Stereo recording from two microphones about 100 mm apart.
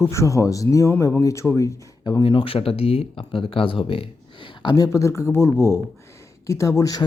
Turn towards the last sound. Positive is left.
turn(degrees=35)  # may be behind; listen again after turning